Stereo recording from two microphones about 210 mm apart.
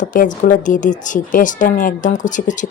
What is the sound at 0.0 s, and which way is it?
A woman's voice, 40° left (ahead or behind).